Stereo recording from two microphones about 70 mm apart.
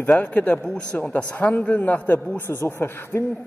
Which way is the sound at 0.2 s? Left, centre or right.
Left.